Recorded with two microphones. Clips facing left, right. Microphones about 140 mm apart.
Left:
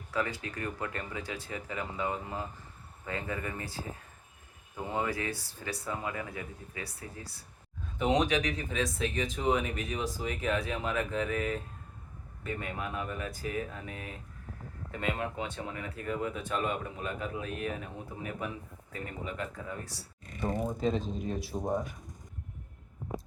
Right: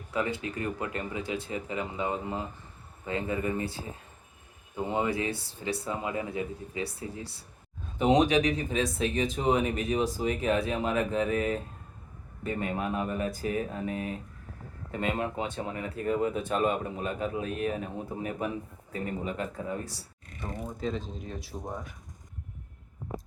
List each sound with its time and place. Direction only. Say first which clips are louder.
0.1 s speech: right 3 dB; 20° right (ahead or behind)
20.6 s speech: left 2 dB; 20° left (ahead or behind)